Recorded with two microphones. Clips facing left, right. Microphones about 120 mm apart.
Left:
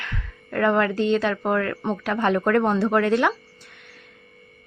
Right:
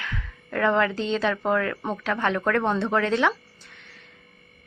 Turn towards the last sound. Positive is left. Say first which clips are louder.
# left 3 dB
turn(degrees=5)  # may be behind; listen again after turning